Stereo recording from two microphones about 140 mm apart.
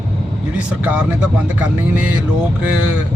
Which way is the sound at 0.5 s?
10° right (ahead or behind).